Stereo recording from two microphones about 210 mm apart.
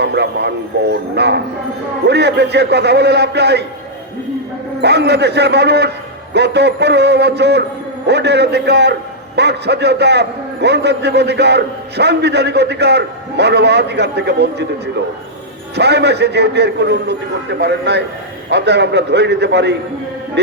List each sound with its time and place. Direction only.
0.0 s a man's voice: 55° right (ahead or behind)
4.8 s a man's voice: 50° right (ahead or behind)
15.7 s a man's voice: 50° right (ahead or behind)